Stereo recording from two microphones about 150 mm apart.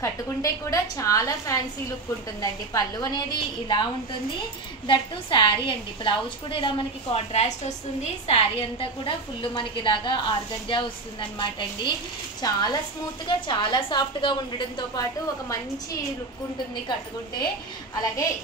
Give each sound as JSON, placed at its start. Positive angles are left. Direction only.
{"t": 0.0, "sound": "a woman's voice", "side_deg": 25}